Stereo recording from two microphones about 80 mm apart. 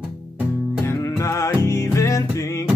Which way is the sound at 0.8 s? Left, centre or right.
Left.